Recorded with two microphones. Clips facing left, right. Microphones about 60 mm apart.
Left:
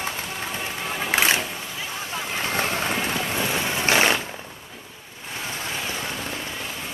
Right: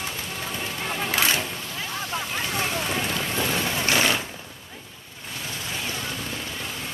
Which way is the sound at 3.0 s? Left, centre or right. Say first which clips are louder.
Left 1 dB; centre.